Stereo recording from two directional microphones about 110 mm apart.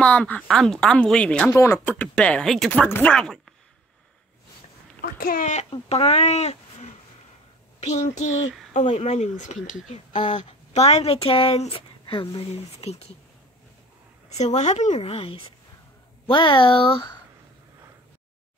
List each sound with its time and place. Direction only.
0.0 s speech: 10° left (ahead or behind)
1.5 s speech: 25° left (ahead or behind)
1.9 s speech: 15° left (ahead or behind)
2.9 s speech: 15° left (ahead or behind)
5.7 s speech: 60° left (ahead or behind); by 6.9 s 80° left
7.8 s speech: 90° left; by 12.3 s 55° left (ahead or behind)
12.4 s speech: 75° left (ahead or behind)
14.3 s a woman's voice: 90° left; by 15.4 s 60° left (ahead or behind)
16.3 s speech: 45° left (ahead or behind)